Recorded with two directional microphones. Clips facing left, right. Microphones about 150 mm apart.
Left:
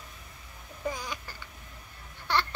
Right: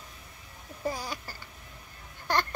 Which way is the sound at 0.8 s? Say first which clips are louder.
Right 1 dB; 35° right (ahead or behind).